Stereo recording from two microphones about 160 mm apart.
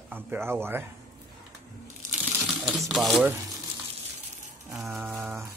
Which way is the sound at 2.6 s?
Centre (ahead or behind).